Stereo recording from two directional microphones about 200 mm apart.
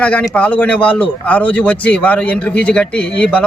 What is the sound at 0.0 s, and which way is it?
A man's voice, 5° left (ahead or behind).